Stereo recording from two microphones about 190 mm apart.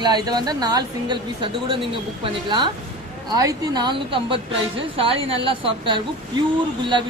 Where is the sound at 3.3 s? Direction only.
20° right (ahead or behind).